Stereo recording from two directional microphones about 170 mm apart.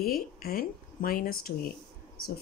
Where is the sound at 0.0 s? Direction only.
60° left (ahead or behind).